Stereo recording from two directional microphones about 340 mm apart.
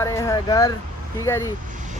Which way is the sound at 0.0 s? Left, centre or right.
Centre.